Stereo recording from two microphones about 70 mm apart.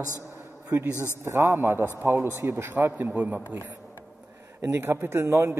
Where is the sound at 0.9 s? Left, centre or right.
Left.